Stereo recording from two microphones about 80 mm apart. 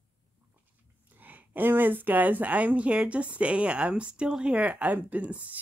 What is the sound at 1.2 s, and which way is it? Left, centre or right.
Speech, right.